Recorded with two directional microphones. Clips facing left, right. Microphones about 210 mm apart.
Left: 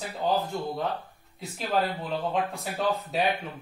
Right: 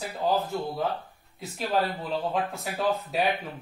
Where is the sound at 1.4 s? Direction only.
Centre (ahead or behind).